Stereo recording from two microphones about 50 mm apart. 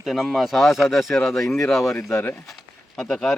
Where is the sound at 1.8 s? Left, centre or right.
Left.